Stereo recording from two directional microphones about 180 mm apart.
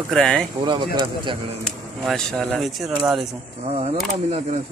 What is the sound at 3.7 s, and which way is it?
Speech, 35° right (ahead or behind).